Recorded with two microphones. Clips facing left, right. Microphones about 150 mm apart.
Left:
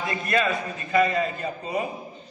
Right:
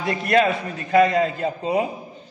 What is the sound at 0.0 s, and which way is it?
A man's voice, 70° right (ahead or behind).